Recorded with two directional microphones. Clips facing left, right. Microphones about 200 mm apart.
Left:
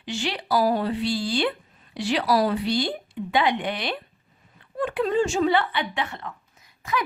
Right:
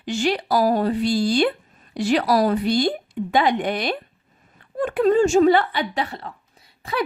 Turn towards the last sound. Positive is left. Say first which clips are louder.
# right 3 dB
turn(degrees=-30)  # may be behind; listen again after turning